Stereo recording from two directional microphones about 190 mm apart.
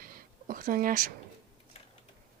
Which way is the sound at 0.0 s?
50° right (ahead or behind).